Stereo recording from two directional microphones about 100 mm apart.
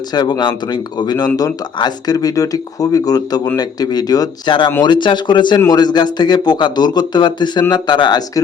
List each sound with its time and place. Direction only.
0.1 s a man's voice: 45° left (ahead or behind)
4.8 s a man's voice: 50° left (ahead or behind)